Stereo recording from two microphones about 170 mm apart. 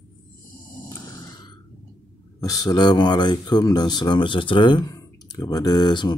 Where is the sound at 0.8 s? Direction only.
20° left (ahead or behind).